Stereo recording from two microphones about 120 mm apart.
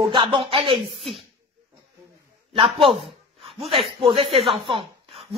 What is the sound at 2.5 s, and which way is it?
A man's voice, 50° right (ahead or behind).